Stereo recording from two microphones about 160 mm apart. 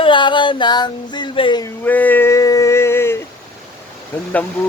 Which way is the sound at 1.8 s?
10° left (ahead or behind).